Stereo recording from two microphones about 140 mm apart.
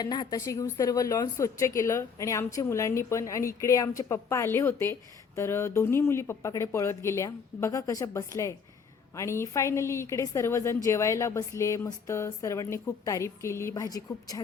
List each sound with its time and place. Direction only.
0.0 s speech: 30° left (ahead or behind)